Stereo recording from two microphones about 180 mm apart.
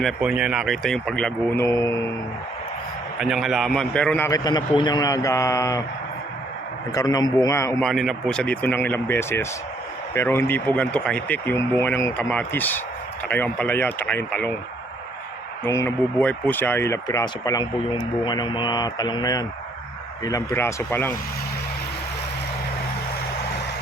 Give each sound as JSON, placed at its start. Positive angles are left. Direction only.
{"t": 0.0, "sound": "speech", "side_deg": -5}
{"t": 1.6, "sound": "speech", "side_deg": 15}
{"t": 3.2, "sound": "speech", "side_deg": 0}
{"t": 4.3, "sound": "speech", "side_deg": 20}
{"t": 6.9, "sound": "speech", "side_deg": 20}
{"t": 7.8, "sound": "speech", "side_deg": 0}
{"t": 15.6, "sound": "speech", "side_deg": 15}